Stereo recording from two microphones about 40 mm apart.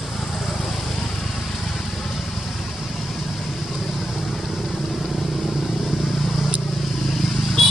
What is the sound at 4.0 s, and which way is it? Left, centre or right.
Vehicle, centre.